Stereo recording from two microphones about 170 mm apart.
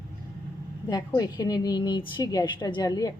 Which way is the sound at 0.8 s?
20° left (ahead or behind).